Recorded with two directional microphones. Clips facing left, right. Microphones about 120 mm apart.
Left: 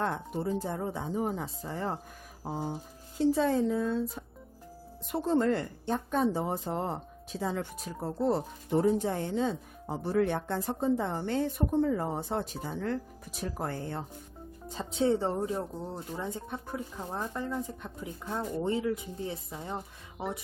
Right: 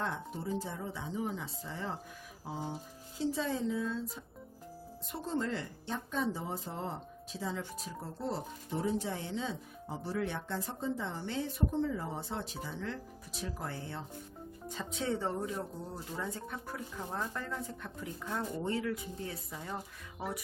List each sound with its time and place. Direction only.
0.0 s speech: 55° left (ahead or behind)
3.2 s speech: 55° left (ahead or behind)
14.7 s speech: 30° left (ahead or behind)